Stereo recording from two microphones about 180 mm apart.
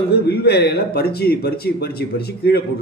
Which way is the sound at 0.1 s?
60° left (ahead or behind).